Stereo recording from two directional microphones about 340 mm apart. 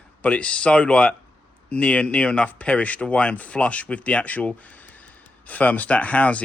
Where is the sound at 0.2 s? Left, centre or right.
Centre.